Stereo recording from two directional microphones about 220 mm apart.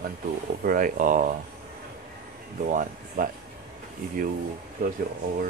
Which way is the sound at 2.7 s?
35° right (ahead or behind).